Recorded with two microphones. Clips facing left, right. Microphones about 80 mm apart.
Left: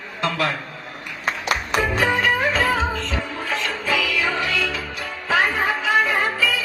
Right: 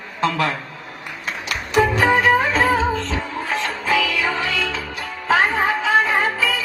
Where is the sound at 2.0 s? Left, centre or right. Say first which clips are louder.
Right 2 dB; right.